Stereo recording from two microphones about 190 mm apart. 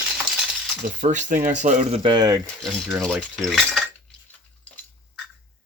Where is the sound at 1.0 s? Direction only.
40° right (ahead or behind); by 2.4 s 20° right (ahead or behind).